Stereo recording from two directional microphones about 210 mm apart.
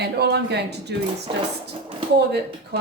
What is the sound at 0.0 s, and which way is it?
Speech, 50° right (ahead or behind).